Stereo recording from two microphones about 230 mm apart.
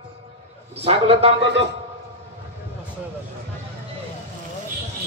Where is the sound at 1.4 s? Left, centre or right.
Right.